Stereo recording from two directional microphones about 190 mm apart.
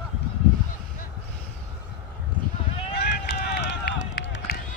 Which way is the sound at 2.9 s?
60° left (ahead or behind).